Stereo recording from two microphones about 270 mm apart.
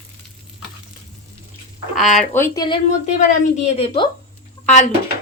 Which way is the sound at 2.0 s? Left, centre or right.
Centre.